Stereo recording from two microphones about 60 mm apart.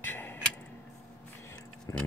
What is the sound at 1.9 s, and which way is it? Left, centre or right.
Tick-tock, left.